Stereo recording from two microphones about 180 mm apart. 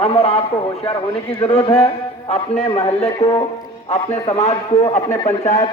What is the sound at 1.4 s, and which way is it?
A man's voice, 30° left (ahead or behind).